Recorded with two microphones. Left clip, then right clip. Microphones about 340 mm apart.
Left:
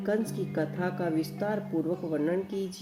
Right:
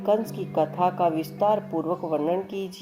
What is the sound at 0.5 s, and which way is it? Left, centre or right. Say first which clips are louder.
Music: right 10 dB; right.